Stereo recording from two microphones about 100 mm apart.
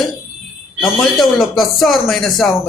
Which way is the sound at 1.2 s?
Centre (ahead or behind).